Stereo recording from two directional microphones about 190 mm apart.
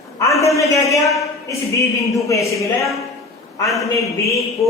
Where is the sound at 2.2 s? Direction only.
15° left (ahead or behind).